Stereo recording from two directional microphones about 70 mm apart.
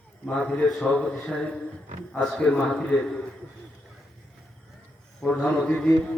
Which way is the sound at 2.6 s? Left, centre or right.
Centre.